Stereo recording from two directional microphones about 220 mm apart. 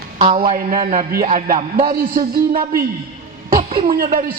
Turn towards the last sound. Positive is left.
turn(degrees=-40)  # may be behind; listen again after turning